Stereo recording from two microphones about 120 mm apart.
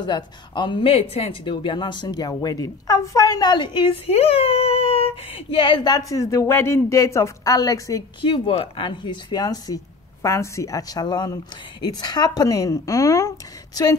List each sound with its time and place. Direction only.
0.0 s speech: 40° left (ahead or behind)
4.1 s speech: 50° left (ahead or behind); by 8.0 s 30° left (ahead or behind)
8.2 s a woman's voice: 50° left (ahead or behind); by 13.3 s 25° left (ahead or behind)